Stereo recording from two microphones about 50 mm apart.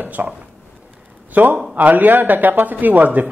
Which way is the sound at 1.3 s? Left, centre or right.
Right.